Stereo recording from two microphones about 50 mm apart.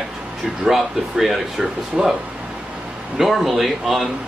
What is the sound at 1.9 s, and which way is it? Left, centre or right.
Speech, centre.